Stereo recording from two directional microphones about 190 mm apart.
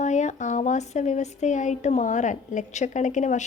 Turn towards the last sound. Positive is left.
turn(degrees=40)  # may be behind; listen again after turning